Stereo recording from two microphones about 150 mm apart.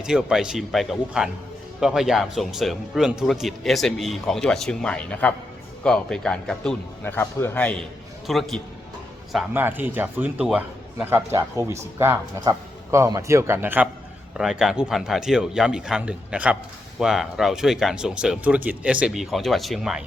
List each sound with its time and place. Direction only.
0.0 s a man's voice: 5° right (ahead or behind)
9.5 s a man's voice: 15° right (ahead or behind)